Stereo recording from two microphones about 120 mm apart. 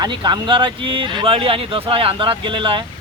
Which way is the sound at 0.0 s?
35° right (ahead or behind).